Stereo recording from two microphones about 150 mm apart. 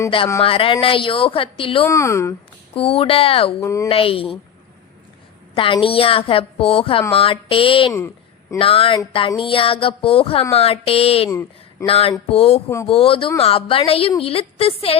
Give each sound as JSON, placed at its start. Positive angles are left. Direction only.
{"t": 0.4, "sound": "a woman's voice", "side_deg": 35}
{"t": 1.8, "sound": "speech", "side_deg": 20}
{"t": 2.7, "sound": "a woman's voice", "side_deg": 40}
{"t": 3.6, "sound": "speech", "side_deg": 20}
{"t": 3.8, "sound": "a woman's voice", "side_deg": 40}
{"t": 5.5, "sound": "a woman's voice", "side_deg": 35}
{"t": 7.9, "sound": "a sound", "side_deg": 15}
{"t": 8.5, "sound": "a woman's voice", "side_deg": 35}
{"t": 11.3, "sound": "speech", "side_deg": 20}
{"t": 11.9, "sound": "a woman's voice", "side_deg": 40}